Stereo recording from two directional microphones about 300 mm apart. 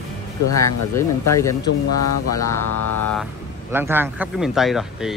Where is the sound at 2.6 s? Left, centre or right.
Left.